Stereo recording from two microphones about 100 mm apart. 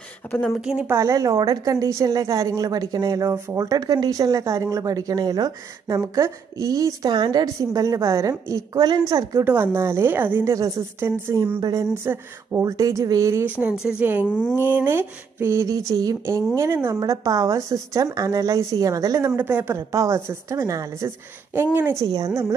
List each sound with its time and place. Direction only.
0.6 s a woman's voice: 10° right (ahead or behind)
0.8 s a woman's voice: 30° right (ahead or behind)
9.4 s speech: 20° right (ahead or behind)
10.4 s a woman's voice: 35° right (ahead or behind)
11.0 s speech: 20° right (ahead or behind)
12.6 s a woman's voice: 35° right (ahead or behind)
13.6 s a woman's voice: 10° right (ahead or behind); by 16.2 s 40° right (ahead or behind)
16.5 s a woman's voice: 25° right (ahead or behind)
19.3 s speech: 20° right (ahead or behind)
21.7 s speech: 20° right (ahead or behind)
22.0 s a woman's voice: 35° right (ahead or behind)